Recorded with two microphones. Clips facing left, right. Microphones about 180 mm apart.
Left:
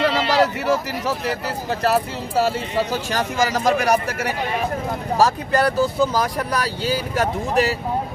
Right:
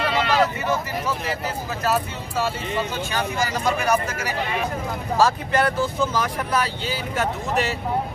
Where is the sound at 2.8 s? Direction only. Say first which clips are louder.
Left 4 dB; 40° left (ahead or behind).